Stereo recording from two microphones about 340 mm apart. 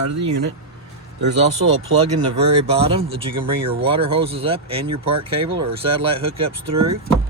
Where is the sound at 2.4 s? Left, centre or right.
Centre.